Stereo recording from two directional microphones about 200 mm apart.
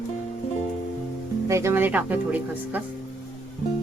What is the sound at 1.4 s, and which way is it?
Speech, 15° right (ahead or behind).